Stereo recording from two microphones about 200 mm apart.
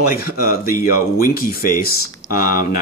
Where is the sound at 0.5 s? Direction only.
45° left (ahead or behind).